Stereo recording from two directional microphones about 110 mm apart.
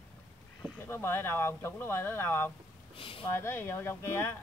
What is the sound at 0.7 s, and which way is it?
Speech, 20° left (ahead or behind).